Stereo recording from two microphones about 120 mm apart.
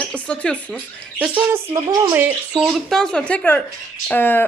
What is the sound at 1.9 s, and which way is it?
Speech, 35° right (ahead or behind).